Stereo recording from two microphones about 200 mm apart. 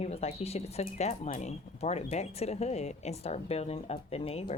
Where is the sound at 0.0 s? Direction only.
30° left (ahead or behind).